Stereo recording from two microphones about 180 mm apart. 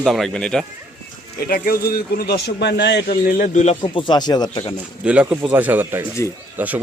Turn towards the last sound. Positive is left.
turn(degrees=-10)  # may be behind; listen again after turning